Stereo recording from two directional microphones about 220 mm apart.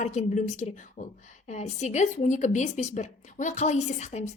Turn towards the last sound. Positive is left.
turn(degrees=30)  # may be behind; listen again after turning